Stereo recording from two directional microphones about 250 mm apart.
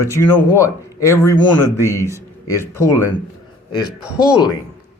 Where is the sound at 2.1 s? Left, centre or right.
Centre.